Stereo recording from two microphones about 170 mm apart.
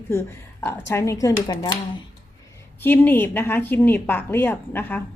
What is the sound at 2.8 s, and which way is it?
A woman's voice, 10° left (ahead or behind).